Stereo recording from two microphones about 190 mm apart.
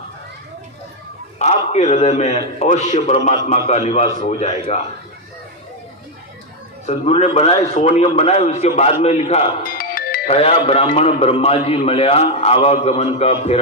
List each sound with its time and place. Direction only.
1.4 s a man's voice: 35° left (ahead or behind)
6.8 s a man's voice: 35° left (ahead or behind)
9.7 s music: 50° left (ahead or behind)
10.2 s a man's voice: 30° left (ahead or behind)